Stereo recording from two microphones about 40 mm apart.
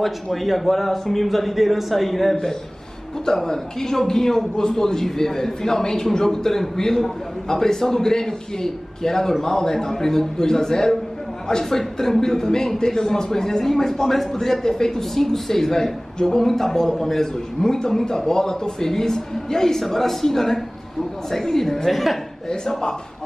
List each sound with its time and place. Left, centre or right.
0.0 s speech: centre
22.5 s speech: centre